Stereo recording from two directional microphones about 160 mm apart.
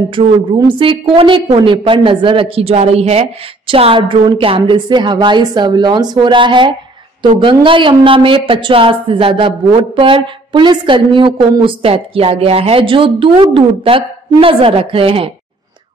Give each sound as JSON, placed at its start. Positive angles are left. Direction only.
{"t": 0.1, "sound": "a woman's voice", "side_deg": -30}